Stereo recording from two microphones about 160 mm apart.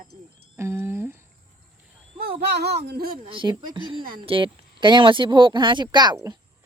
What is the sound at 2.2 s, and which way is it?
Speech, 80° right.